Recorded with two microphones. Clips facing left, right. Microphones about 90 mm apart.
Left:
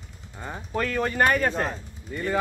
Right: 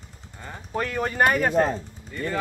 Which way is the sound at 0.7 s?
15° right (ahead or behind).